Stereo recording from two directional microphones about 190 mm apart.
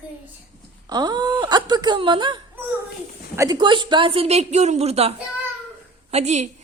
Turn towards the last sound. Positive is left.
turn(degrees=-35)  # may be behind; listen again after turning